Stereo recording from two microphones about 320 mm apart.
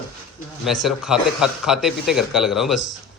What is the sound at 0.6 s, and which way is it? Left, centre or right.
Speech, centre.